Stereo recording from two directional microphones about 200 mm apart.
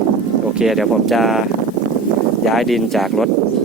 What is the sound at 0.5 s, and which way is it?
Speech, centre (ahead or behind).